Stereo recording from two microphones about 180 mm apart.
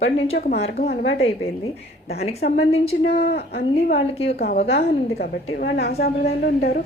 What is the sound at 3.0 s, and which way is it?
Speech, 65° left (ahead or behind).